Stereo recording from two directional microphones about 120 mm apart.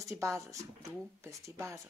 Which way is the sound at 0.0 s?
25° right (ahead or behind).